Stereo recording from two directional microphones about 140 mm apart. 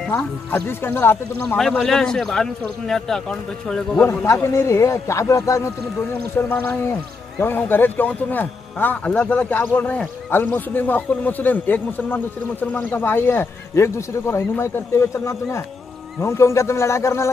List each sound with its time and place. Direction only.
0.0 s speech: 5° left (ahead or behind)
1.6 s a man's voice: centre (ahead or behind)
4.0 s speech: 20° left (ahead or behind)